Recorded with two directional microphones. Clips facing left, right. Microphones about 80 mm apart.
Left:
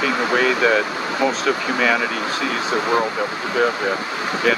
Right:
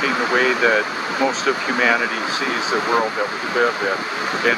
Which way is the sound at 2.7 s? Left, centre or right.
Centre.